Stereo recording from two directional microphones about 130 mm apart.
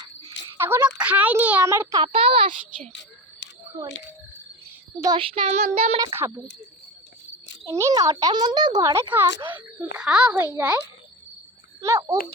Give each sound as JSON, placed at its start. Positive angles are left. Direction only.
{"t": 0.5, "sound": "a sound", "side_deg": -20}
{"t": 0.9, "sound": "a child's voice", "side_deg": -10}
{"t": 2.0, "sound": "child singing", "side_deg": -45}
{"t": 5.0, "sound": "child singing", "side_deg": -40}
{"t": 6.1, "sound": "a child's voice", "side_deg": -15}
{"t": 7.7, "sound": "a child's voice", "side_deg": -25}
{"t": 11.8, "sound": "speech", "side_deg": -25}